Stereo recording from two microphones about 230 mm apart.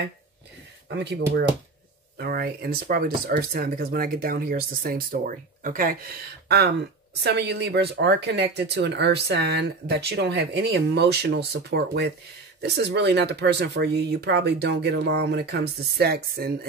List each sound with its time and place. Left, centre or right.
0.8 s speech: right